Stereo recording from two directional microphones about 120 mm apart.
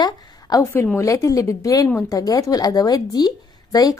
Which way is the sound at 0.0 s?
35° left (ahead or behind).